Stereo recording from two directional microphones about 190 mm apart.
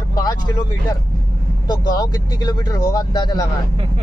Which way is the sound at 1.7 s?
20° left (ahead or behind).